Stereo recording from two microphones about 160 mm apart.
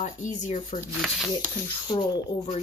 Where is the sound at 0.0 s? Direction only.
50° left (ahead or behind).